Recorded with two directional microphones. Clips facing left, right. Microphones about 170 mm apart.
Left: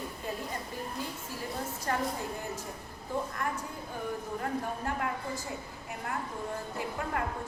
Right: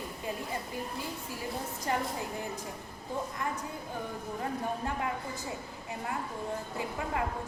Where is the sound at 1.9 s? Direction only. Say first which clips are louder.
Even; 15° right (ahead or behind).